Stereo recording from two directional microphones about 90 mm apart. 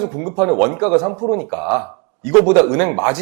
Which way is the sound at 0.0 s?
20° right (ahead or behind).